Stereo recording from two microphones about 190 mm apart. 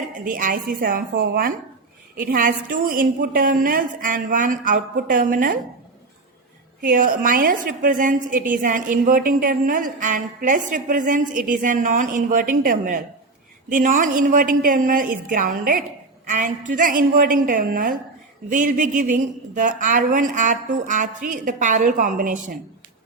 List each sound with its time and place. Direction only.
0.3 s a woman's voice: 45° right (ahead or behind)
6.8 s a woman's voice: 45° right (ahead or behind)